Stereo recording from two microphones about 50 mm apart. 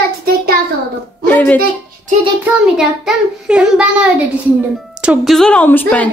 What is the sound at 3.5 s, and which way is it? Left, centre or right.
Speech, centre.